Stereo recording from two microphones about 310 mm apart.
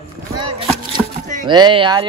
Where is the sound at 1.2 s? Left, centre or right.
Centre.